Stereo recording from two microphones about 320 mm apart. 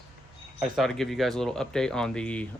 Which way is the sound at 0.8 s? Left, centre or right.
Centre.